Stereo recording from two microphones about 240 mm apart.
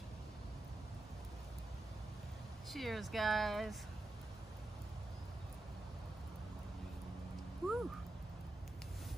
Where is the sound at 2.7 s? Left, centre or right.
Centre.